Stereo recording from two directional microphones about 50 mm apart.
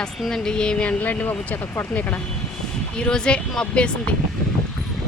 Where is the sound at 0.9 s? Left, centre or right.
Left.